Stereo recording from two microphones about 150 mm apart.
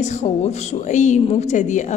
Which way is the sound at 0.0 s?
50° left (ahead or behind).